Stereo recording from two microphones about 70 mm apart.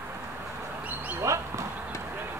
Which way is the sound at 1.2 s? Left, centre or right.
Right.